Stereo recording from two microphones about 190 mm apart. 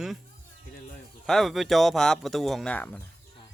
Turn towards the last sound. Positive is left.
turn(degrees=5)  # may be behind; listen again after turning